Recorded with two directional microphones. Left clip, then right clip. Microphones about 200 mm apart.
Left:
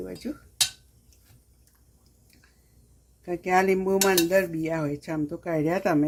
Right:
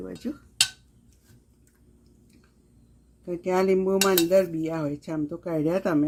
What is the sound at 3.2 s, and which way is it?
Speech, 15° left (ahead or behind).